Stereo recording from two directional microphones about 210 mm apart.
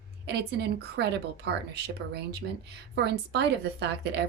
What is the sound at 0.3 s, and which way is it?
Speech, 50° right (ahead or behind).